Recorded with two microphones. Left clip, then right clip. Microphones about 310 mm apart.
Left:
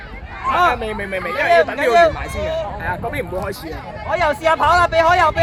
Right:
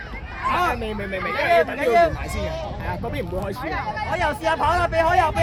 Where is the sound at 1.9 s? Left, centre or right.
Left.